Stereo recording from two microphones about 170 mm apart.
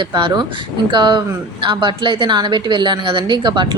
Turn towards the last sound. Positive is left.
turn(degrees=-25)  # may be behind; listen again after turning